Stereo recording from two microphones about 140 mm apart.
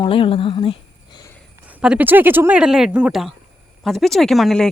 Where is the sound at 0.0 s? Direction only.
40° left (ahead or behind).